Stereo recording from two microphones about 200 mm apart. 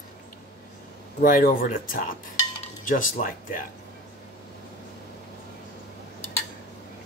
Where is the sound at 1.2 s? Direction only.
45° left (ahead or behind).